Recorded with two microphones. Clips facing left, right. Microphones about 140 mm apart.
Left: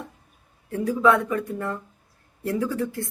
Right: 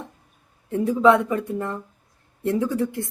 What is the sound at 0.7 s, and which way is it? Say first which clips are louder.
Speech: right 3 dB; 20° right (ahead or behind).